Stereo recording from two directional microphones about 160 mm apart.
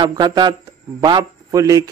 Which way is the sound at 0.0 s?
25° right (ahead or behind).